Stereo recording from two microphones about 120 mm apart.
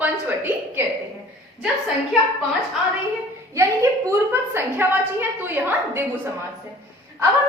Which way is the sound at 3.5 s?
25° right (ahead or behind).